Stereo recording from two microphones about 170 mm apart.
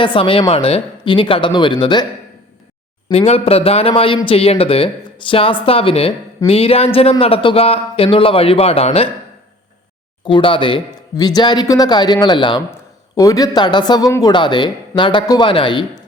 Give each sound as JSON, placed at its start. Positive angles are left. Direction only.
{"t": 0.0, "sound": "speech", "side_deg": 30}
{"t": 3.1, "sound": "speech", "side_deg": 35}
{"t": 10.2, "sound": "speech", "side_deg": 30}